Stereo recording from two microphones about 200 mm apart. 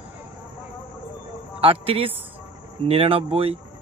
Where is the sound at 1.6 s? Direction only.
30° right (ahead or behind).